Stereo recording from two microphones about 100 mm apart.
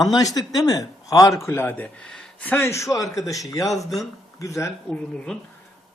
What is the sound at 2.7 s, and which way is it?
Speech, 30° left (ahead or behind).